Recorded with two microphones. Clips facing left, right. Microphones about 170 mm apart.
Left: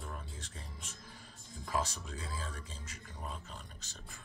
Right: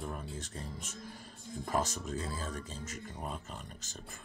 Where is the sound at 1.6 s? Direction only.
45° right (ahead or behind).